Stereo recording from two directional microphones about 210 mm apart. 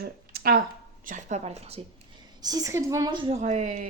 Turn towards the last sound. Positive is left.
turn(degrees=-35)  # may be behind; listen again after turning